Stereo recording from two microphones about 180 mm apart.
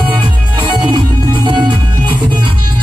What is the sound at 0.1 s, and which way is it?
Music, 25° right (ahead or behind).